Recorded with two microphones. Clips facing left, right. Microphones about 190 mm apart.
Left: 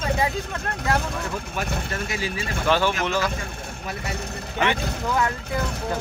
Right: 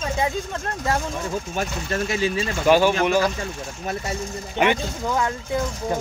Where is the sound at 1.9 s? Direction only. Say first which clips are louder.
Right 6 dB; 25° right (ahead or behind).